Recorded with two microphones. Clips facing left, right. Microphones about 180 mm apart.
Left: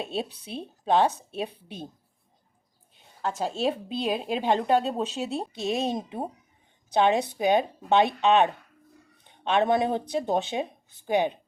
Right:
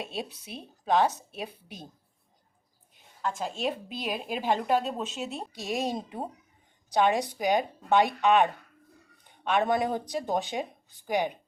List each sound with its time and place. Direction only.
0.0 s speech: 30° left (ahead or behind)
2.9 s a sound: 35° left (ahead or behind)
3.6 s speech: 30° left (ahead or behind)
5.5 s speech: 20° left (ahead or behind)